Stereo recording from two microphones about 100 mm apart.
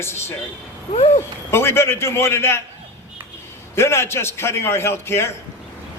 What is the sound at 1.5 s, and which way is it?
A man's voice, 25° left (ahead or behind).